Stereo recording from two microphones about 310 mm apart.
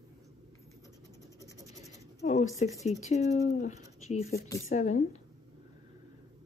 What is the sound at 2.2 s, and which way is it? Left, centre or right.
Speech, left.